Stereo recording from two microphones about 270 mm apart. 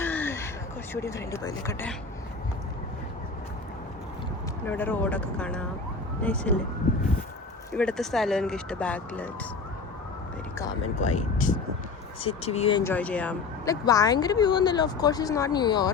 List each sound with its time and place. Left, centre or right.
0.0 s a sound: centre
1.0 s speech: centre
4.6 s speech: centre
7.7 s speech: centre
10.9 s speech: left
12.8 s speech: centre